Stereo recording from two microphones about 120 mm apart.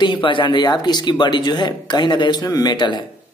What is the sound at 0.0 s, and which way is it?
Speech, 40° left (ahead or behind).